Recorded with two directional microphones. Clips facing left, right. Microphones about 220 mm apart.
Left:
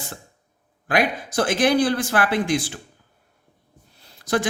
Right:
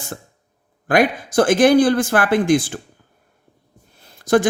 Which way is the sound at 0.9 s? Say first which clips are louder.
Right 5 dB; 50° right (ahead or behind).